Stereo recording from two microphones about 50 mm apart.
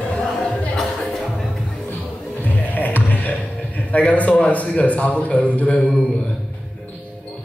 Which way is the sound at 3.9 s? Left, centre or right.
Left.